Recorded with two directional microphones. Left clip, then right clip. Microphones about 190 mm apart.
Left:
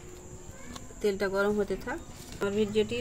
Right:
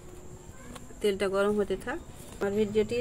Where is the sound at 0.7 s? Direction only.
20° right (ahead or behind).